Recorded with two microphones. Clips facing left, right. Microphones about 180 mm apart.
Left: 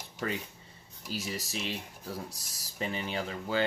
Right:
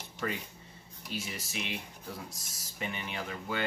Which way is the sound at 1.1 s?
35° left (ahead or behind).